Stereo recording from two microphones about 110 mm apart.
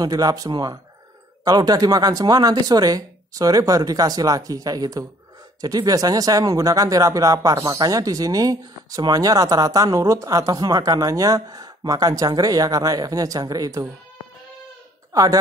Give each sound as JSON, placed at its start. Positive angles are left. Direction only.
{"t": 0.0, "sound": "speech", "side_deg": -35}